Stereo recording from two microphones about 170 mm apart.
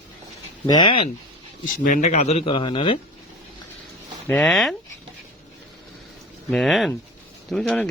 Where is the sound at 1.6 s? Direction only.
50° left (ahead or behind); by 3.0 s 30° left (ahead or behind).